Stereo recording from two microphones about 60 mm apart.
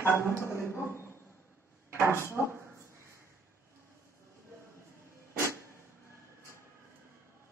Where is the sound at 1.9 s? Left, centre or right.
Right.